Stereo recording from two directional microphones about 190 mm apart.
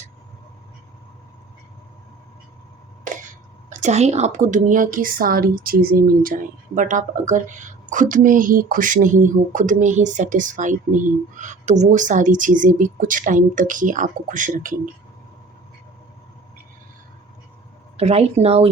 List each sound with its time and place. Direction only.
3.7 s a woman's voice: 40° right (ahead or behind)
17.9 s speech: 35° right (ahead or behind)